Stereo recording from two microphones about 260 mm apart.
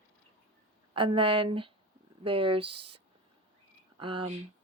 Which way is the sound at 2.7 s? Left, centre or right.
Right.